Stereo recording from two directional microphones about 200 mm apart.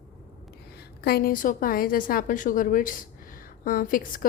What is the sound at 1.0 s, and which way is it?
A woman's voice, 50° left (ahead or behind).